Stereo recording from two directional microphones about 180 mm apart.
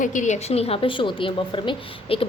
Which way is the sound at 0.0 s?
45° left (ahead or behind).